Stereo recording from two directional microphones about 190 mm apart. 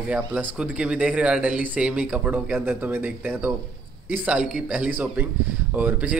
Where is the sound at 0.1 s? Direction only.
5° right (ahead or behind).